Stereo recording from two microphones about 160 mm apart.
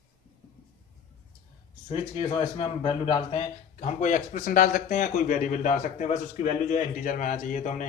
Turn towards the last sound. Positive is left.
turn(degrees=50)  # may be behind; listen again after turning